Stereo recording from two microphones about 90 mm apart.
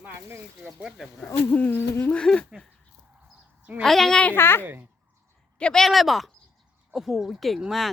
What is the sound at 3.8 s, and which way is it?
Speech, 5° left (ahead or behind).